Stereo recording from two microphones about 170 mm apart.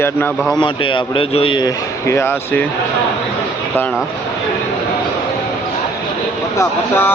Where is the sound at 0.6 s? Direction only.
30° left (ahead or behind); by 2.6 s 10° left (ahead or behind).